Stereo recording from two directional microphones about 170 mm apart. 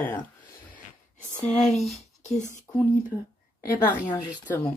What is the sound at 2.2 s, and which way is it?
Speech, 45° left (ahead or behind).